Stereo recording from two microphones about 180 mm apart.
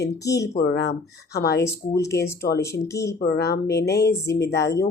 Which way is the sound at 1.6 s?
15° left (ahead or behind).